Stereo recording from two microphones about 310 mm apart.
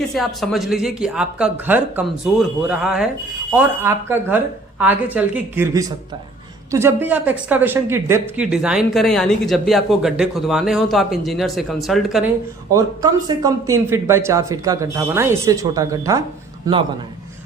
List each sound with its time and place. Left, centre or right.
0.1 s speech: centre
12.7 s speech: centre